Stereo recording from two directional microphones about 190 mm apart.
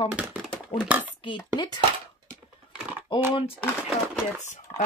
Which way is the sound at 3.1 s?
25° left (ahead or behind).